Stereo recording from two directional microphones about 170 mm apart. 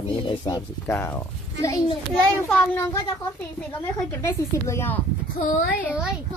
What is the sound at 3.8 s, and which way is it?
A woman's voice, 15° left (ahead or behind).